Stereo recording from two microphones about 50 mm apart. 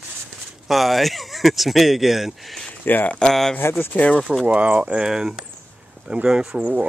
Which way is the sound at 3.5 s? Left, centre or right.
Left.